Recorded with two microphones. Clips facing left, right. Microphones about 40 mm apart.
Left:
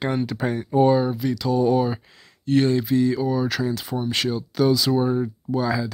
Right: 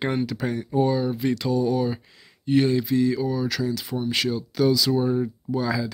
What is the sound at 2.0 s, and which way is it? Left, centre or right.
Speech, centre.